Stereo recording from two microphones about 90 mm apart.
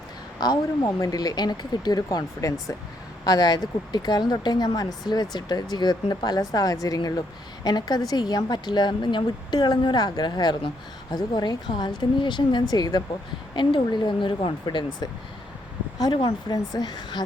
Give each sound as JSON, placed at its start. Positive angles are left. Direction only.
{"t": 0.3, "sound": "a woman's voice", "side_deg": 50}
{"t": 16.0, "sound": "a woman's voice", "side_deg": 45}